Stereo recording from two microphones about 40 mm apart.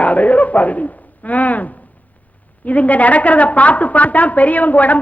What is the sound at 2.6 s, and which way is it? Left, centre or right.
A man's voice, left.